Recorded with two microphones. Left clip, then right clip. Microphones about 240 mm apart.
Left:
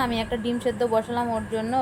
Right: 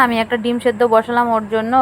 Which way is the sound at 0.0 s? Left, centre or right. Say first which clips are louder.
Right 11 dB; right.